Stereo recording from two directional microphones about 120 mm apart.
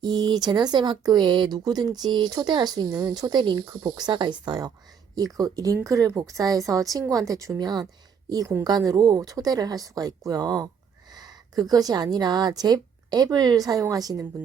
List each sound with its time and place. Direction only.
0.0 s a woman's voice: 35° right (ahead or behind)